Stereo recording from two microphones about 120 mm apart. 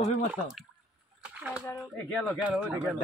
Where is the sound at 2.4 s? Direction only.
10° right (ahead or behind).